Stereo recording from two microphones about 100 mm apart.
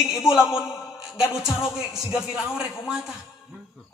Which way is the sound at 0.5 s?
25° left (ahead or behind).